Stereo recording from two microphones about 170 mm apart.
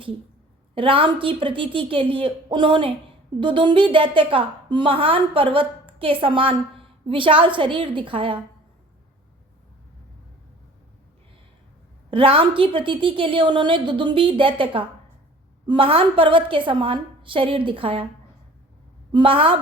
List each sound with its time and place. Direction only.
0.8 s a woman's voice: 30° right (ahead or behind)
12.1 s a woman's voice: 30° right (ahead or behind)
19.1 s a woman's voice: 30° right (ahead or behind)